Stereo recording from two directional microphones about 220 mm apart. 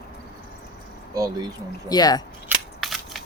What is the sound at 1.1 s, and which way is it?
Speech, 15° right (ahead or behind).